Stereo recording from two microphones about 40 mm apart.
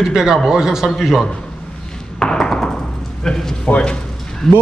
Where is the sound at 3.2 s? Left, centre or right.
Centre.